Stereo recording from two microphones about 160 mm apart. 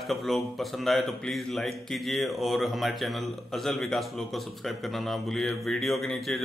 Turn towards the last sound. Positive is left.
turn(degrees=0)  # may be behind; listen again after turning